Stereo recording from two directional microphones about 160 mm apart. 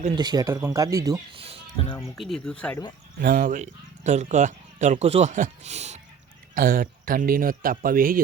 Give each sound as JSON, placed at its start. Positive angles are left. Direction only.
{"t": 0.2, "sound": "speech", "side_deg": -25}
{"t": 1.4, "sound": "music", "side_deg": -35}
{"t": 2.1, "sound": "speech", "side_deg": 0}
{"t": 3.2, "sound": "speech", "side_deg": -60}
{"t": 6.5, "sound": "a man's voice", "side_deg": -60}